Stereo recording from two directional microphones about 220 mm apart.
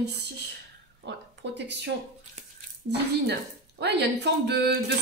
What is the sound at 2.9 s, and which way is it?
Speech, 50° right (ahead or behind).